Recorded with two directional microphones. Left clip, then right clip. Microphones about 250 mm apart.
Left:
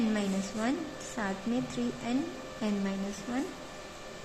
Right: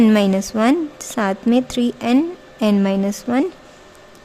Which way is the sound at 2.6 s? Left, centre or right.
Right.